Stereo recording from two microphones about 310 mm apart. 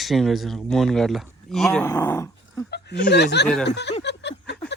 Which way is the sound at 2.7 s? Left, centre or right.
Left.